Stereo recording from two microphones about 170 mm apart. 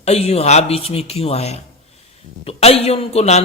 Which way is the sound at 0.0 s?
40° left (ahead or behind).